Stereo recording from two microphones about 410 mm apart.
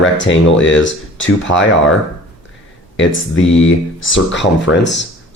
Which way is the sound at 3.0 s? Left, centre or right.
Left.